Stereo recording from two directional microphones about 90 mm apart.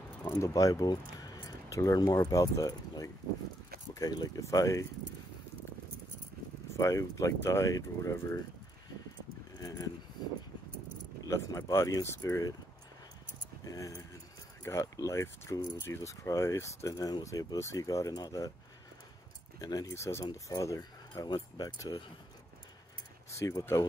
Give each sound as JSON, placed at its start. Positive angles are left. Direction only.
{"t": 0.4, "sound": "speech", "side_deg": 40}
{"t": 6.8, "sound": "speech", "side_deg": 35}
{"t": 9.6, "sound": "a sound", "side_deg": 40}
{"t": 11.2, "sound": "speech", "side_deg": 35}
{"t": 13.7, "sound": "speech", "side_deg": 40}
{"t": 19.6, "sound": "speech", "side_deg": 45}
{"t": 19.9, "sound": "speech", "side_deg": 30}
{"t": 23.3, "sound": "speech", "side_deg": 40}